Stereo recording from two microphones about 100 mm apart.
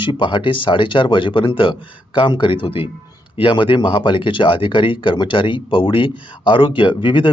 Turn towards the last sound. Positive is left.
turn(degrees=55)  # may be behind; listen again after turning